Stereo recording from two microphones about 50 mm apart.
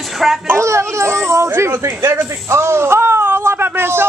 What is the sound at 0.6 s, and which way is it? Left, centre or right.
Speech, right.